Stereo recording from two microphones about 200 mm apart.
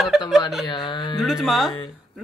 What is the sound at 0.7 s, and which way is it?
Speech, 25° left (ahead or behind).